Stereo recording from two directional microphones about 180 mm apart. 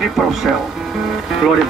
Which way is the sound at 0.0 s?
Centre (ahead or behind).